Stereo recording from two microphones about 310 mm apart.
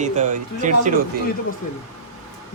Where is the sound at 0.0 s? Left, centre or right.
Right.